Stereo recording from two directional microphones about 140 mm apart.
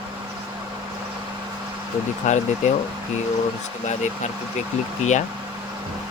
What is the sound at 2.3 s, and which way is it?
Speech, 60° left (ahead or behind).